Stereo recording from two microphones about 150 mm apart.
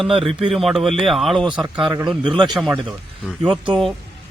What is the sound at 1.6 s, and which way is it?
Speech, 30° right (ahead or behind).